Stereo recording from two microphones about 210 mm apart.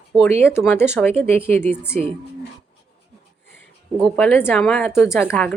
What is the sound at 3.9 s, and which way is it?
Speech, centre (ahead or behind).